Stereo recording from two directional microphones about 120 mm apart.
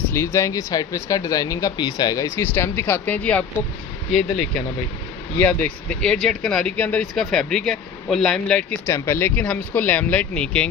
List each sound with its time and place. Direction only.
0.2 s speech: 20° left (ahead or behind)
7.0 s speech: centre (ahead or behind)
8.9 s speech: 20° left (ahead or behind)